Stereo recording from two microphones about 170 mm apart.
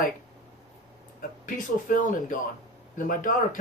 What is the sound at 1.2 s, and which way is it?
Speech, 55° left (ahead or behind).